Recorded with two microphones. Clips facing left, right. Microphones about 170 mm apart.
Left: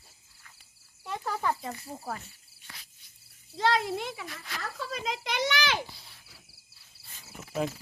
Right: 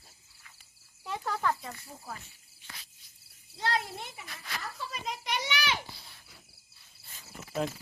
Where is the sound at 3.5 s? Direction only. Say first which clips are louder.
Left 6 dB; 90° left.